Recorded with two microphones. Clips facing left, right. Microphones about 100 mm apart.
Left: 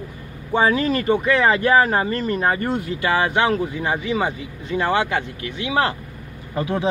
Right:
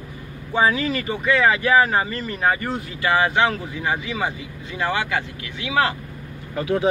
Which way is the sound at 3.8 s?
35° left (ahead or behind).